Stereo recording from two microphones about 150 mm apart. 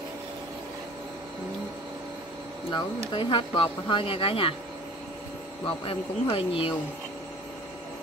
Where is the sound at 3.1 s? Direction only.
35° left (ahead or behind).